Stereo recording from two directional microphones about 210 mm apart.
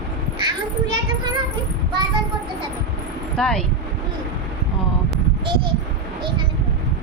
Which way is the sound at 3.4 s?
5° left (ahead or behind).